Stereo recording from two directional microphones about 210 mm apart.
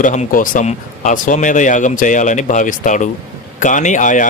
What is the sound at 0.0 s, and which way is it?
Speech, 35° left (ahead or behind).